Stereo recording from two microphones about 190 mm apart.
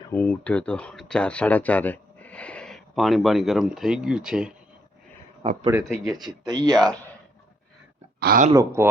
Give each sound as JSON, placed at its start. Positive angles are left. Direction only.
{"t": 0.1, "sound": "speech", "side_deg": 10}
{"t": 5.9, "sound": "speech", "side_deg": 0}
{"t": 6.2, "sound": "speech", "side_deg": -20}
{"t": 6.7, "sound": "speech", "side_deg": 5}
{"t": 8.2, "sound": "speech", "side_deg": -50}
{"t": 8.5, "sound": "speech", "side_deg": -15}